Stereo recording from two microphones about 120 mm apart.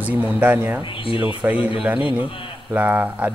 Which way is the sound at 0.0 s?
15° right (ahead or behind).